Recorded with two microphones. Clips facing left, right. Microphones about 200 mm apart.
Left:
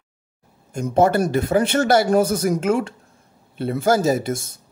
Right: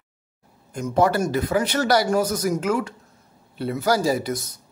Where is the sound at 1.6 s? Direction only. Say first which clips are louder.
Left 4 dB; 50° left (ahead or behind).